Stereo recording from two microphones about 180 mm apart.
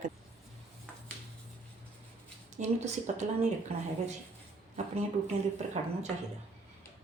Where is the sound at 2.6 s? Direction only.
40° right (ahead or behind).